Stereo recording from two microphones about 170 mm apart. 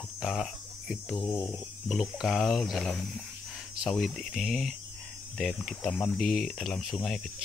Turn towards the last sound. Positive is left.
turn(degrees=5)  # may be behind; listen again after turning